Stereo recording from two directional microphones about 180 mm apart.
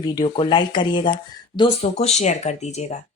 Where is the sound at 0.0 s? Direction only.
20° left (ahead or behind).